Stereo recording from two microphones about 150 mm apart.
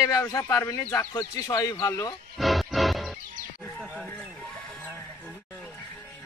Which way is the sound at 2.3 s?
Centre (ahead or behind).